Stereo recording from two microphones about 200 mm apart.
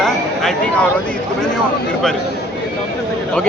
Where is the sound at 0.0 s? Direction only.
Centre (ahead or behind).